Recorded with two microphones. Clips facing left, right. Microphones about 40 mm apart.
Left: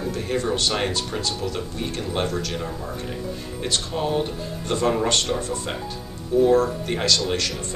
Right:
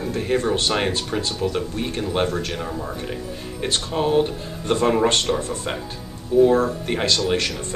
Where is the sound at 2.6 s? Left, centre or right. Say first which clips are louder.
Right 2 dB; centre.